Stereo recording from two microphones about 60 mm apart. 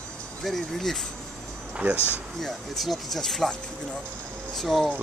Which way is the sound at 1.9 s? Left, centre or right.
Left.